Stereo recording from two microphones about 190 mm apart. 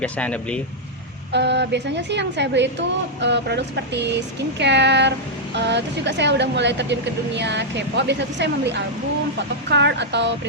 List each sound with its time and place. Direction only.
0.0 s speech: 5° left (ahead or behind)
1.3 s a woman's voice: 65° right (ahead or behind)